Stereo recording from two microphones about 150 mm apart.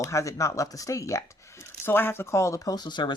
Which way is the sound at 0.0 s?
20° left (ahead or behind).